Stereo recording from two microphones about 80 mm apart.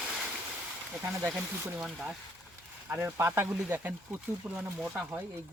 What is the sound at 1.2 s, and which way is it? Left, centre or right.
Speech, right.